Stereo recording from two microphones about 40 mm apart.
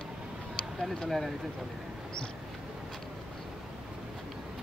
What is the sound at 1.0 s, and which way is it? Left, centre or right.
Speech, centre.